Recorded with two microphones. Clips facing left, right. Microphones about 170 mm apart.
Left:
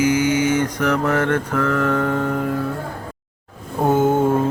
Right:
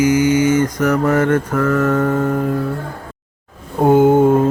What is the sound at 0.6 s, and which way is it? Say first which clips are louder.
Mantra: right 4 dB; 10° right (ahead or behind).